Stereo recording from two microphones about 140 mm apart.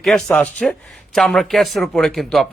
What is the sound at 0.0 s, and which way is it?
Speech, 5° left (ahead or behind).